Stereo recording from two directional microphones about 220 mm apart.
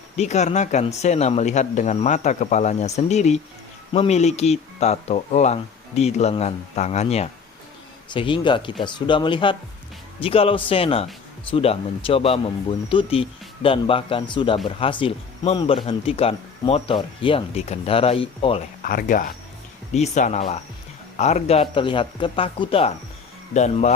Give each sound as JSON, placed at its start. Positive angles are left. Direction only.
{"t": 0.2, "sound": "speech", "side_deg": 30}
{"t": 18.9, "sound": "speech", "side_deg": 40}